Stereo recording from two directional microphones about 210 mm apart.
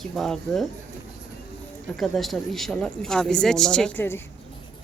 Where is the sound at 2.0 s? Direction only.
Centre (ahead or behind).